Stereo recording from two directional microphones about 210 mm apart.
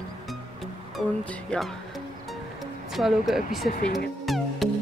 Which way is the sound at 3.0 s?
Centre (ahead or behind).